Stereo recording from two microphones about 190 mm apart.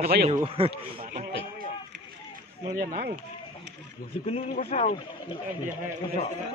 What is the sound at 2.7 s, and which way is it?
Speech, 50° right (ahead or behind).